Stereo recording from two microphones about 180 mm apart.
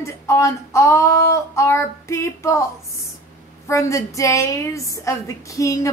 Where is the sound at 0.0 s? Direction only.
15° left (ahead or behind).